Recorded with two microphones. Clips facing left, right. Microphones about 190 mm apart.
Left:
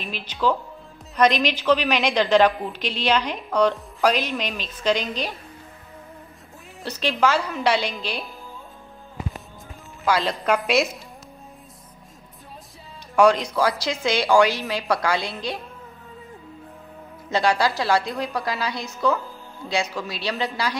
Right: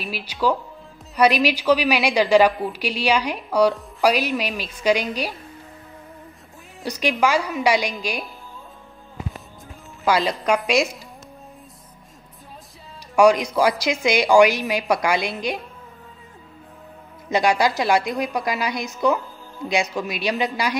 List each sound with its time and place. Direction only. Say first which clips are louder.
0.0 s a woman's voice: right 1 dB; 10° right (ahead or behind)
6.8 s a woman's voice: right 1 dB; 15° right (ahead or behind)
10.1 s a woman's voice: right 1 dB; centre (ahead or behind)
13.1 s a woman's voice: right 2 dB; 10° right (ahead or behind)
17.3 s a woman's voice: right 2 dB; 15° right (ahead or behind)